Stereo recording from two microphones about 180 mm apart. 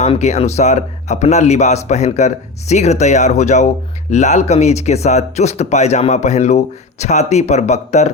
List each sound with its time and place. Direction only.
0.0 s a man's voice: 40° left (ahead or behind)